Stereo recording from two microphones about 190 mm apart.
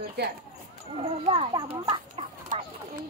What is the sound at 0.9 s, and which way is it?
Speech, 30° right (ahead or behind).